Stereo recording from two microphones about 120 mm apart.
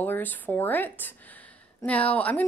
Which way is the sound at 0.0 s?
15° left (ahead or behind).